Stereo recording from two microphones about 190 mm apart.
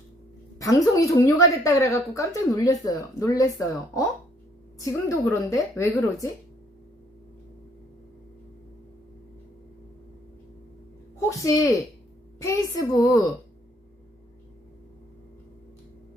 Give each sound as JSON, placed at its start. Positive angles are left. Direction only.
{"t": 0.6, "sound": "a woman's voice", "side_deg": 15}
{"t": 11.3, "sound": "a woman's voice", "side_deg": 15}